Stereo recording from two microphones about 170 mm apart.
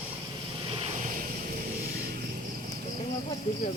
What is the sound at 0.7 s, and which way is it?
Vehicle, 35° right (ahead or behind).